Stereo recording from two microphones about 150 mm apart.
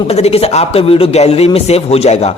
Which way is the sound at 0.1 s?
45° left (ahead or behind).